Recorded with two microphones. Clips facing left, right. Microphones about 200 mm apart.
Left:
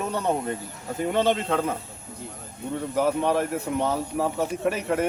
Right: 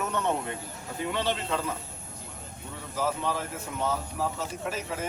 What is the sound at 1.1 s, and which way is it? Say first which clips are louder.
Speech: left 7 dB; 50° left (ahead or behind).